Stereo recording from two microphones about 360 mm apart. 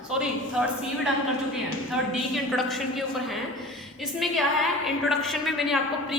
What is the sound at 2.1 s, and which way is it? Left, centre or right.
Speech, centre.